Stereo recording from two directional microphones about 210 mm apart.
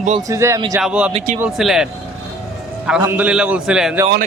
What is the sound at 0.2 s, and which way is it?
Speech, 15° right (ahead or behind).